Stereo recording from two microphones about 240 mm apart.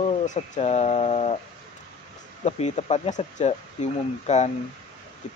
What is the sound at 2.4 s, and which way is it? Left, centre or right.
Speech, left.